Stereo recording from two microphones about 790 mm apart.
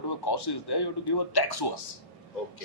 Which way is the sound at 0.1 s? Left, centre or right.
Left.